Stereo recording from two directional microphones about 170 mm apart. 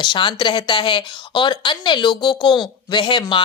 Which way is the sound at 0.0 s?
30° left (ahead or behind).